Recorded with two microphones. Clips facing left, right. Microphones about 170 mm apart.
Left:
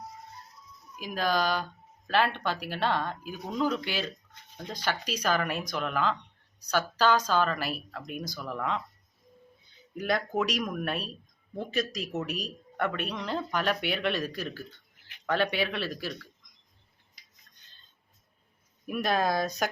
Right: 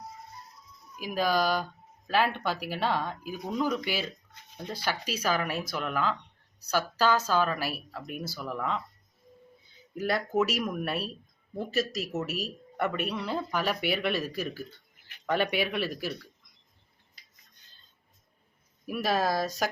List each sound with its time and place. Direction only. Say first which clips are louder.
0.9 s a woman's voice: right 1 dB; 10° right (ahead or behind)
9.9 s a woman's voice: right 1 dB; 5° right (ahead or behind)
18.9 s speech: even; 5° right (ahead or behind)